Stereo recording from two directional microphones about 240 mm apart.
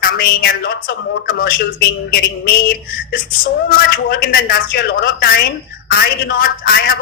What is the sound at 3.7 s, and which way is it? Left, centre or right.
A woman's voice, left.